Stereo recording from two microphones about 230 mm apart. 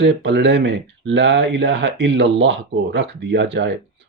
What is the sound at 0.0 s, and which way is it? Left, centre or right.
Speech, right.